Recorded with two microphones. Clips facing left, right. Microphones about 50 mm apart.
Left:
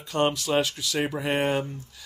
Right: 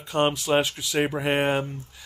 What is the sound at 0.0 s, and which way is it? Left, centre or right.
Speech, right.